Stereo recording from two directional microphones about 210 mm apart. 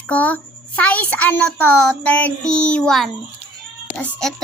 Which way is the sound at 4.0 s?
Centre (ahead or behind).